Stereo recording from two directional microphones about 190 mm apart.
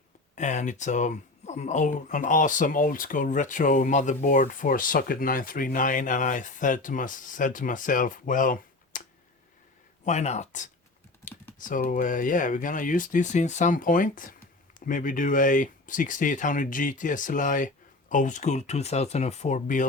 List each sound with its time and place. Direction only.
0.3 s speech: 40° left (ahead or behind)